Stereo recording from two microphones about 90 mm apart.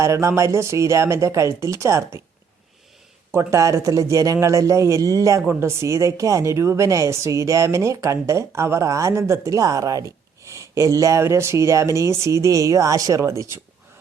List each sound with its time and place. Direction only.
0.0 s speech: 30° right (ahead or behind)
3.3 s speech: 35° right (ahead or behind)